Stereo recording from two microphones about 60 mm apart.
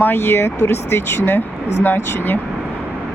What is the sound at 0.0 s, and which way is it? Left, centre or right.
Speech, left.